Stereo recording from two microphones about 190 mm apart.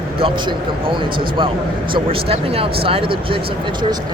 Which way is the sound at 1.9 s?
30° right (ahead or behind).